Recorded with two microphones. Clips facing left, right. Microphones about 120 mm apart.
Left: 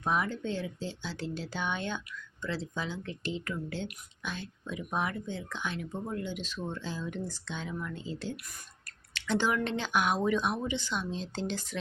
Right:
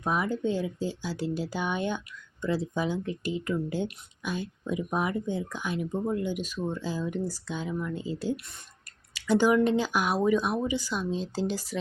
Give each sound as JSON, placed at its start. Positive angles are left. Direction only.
{"t": 0.0, "sound": "speech", "side_deg": -10}